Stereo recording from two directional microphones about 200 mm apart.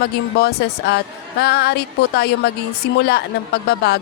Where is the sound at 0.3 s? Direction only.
55° left (ahead or behind).